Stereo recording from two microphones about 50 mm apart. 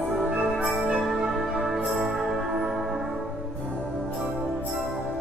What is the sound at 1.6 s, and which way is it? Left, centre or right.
Music, centre.